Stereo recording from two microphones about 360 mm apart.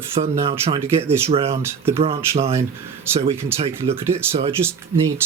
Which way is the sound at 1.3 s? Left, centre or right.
Centre.